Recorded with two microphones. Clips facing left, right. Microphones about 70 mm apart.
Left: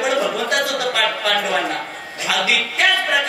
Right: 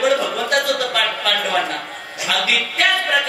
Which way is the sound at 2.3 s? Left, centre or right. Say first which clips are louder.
Left 1 dB; centre.